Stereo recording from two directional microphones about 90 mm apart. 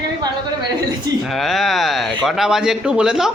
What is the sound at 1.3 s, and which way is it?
A man's voice, centre (ahead or behind).